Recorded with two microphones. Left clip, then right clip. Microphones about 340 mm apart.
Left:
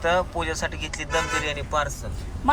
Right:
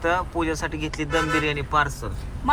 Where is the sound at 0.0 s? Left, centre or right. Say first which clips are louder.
Even; centre.